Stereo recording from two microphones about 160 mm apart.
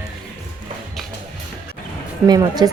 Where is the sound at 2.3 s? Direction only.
25° right (ahead or behind).